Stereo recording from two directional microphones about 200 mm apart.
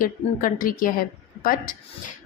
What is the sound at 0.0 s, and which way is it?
A woman's voice, 45° left (ahead or behind).